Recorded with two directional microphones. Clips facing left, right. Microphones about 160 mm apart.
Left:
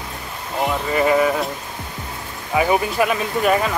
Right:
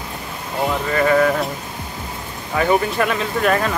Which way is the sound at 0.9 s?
15° left (ahead or behind).